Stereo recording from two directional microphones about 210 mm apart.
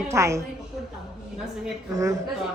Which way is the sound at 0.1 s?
15° right (ahead or behind).